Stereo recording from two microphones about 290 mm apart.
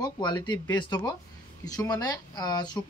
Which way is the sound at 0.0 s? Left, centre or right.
Centre.